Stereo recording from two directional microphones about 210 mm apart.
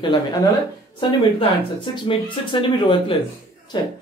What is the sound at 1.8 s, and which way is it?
Speech, 25° left (ahead or behind).